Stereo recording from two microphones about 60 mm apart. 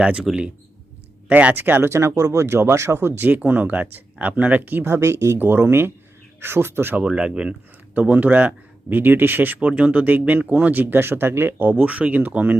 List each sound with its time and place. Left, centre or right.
0.0 s speech: centre
1.3 s speech: right
3.2 s speech: right
5.4 s speech: right
6.9 s speech: right